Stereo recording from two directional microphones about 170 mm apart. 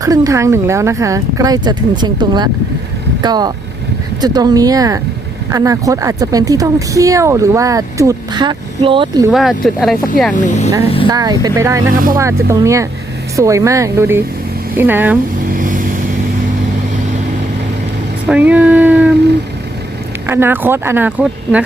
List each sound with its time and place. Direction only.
0.0 s speech: 20° right (ahead or behind)
9.3 s speech: centre (ahead or behind)
10.3 s speech: 50° left (ahead or behind)
11.1 s speech: 20° right (ahead or behind)
15.5 s vehicle: 55° right (ahead or behind)
18.3 s a sound: 10° right (ahead or behind)
20.2 s speech: 15° right (ahead or behind)